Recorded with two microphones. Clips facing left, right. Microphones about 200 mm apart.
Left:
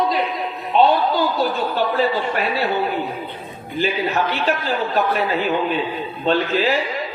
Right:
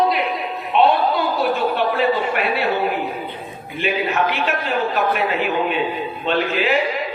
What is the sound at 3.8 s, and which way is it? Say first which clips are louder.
A man's voice: even; 35° left (ahead or behind).